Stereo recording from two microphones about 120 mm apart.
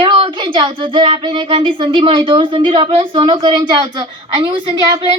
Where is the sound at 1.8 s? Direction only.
45° right (ahead or behind).